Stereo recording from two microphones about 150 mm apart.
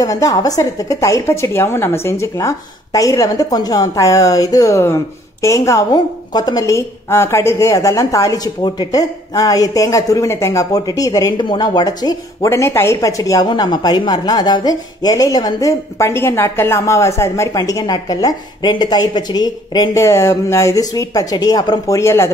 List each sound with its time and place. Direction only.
0.0 s a woman's voice: 25° left (ahead or behind)